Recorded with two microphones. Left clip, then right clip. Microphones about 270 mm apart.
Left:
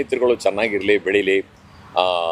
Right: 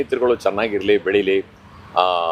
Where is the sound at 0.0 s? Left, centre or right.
Centre.